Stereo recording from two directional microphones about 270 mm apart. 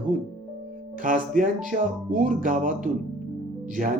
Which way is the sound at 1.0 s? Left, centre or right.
Right.